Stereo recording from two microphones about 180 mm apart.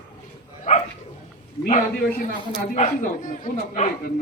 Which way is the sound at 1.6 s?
50° left (ahead or behind).